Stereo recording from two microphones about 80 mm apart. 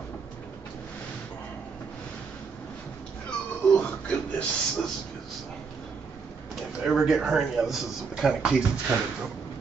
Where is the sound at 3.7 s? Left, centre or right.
Centre.